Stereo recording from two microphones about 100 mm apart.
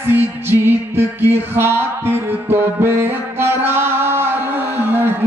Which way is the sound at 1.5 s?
25° right (ahead or behind).